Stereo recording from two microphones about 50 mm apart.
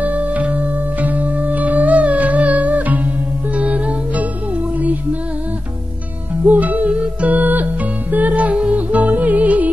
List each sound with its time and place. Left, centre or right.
0.0 s music: right
6.4 s music: right